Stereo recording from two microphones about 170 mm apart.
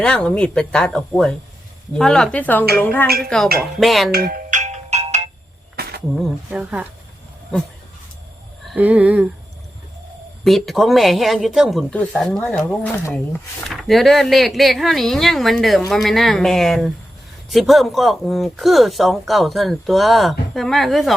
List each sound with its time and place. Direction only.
0.0 s a woman's voice: 5° left (ahead or behind)
4.1 s ringtone: 60° right (ahead or behind); by 5.3 s 40° right (ahead or behind)
5.7 s cricket: 65° right (ahead or behind)
6.5 s speech: 10° right (ahead or behind)
8.6 s speech: 10° right (ahead or behind)
10.4 s speech: centre (ahead or behind)